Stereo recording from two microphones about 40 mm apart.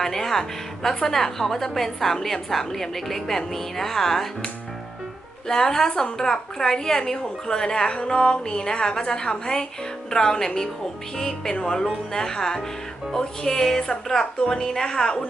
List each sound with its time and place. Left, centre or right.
0.0 s a woman's voice: centre
5.5 s a woman's voice: centre